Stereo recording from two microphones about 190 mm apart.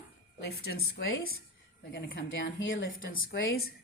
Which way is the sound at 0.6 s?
55° left (ahead or behind).